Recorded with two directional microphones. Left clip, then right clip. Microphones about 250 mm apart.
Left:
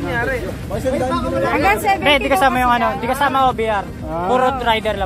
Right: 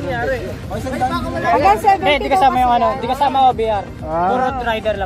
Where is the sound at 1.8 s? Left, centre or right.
Left.